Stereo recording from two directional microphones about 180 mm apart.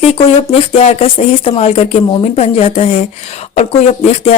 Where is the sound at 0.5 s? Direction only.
35° left (ahead or behind).